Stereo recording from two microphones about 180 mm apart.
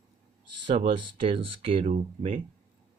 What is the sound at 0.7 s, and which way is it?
Speech, 30° right (ahead or behind).